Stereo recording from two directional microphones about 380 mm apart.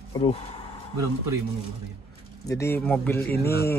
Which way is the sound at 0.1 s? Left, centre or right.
Centre.